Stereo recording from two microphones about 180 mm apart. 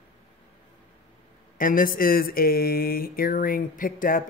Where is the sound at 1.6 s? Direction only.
50° left (ahead or behind).